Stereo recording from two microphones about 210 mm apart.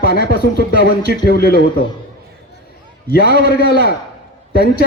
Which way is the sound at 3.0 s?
45° left (ahead or behind).